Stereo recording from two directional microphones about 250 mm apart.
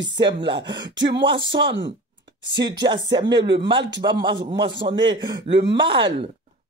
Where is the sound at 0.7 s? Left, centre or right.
Right.